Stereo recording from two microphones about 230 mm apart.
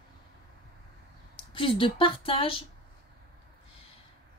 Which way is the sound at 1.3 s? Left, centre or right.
Left.